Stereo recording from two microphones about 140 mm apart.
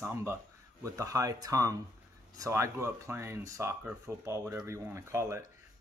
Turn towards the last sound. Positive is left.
turn(degrees=-20)  # may be behind; listen again after turning